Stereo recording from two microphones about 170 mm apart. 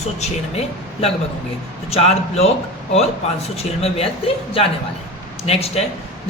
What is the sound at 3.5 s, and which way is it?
Speech, 35° left (ahead or behind).